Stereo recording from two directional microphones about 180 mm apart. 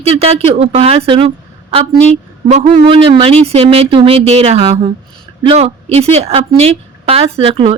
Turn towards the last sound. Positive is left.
turn(degrees=-30)  # may be behind; listen again after turning